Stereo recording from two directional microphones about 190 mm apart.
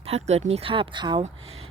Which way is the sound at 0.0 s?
35° right (ahead or behind).